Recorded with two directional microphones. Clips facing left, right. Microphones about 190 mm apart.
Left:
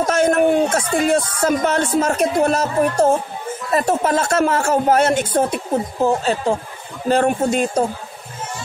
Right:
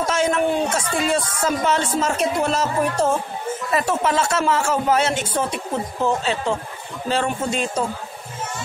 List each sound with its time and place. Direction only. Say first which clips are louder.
0.0 s speech: left 5 dB; 50° left (ahead or behind)